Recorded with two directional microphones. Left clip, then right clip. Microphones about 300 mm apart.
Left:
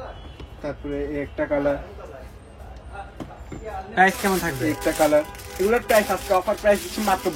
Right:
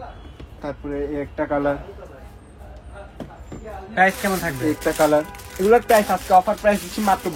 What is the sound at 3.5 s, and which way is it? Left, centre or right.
Speech, centre.